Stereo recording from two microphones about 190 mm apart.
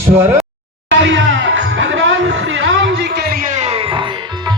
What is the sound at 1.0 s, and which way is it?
Music, 75° right (ahead or behind).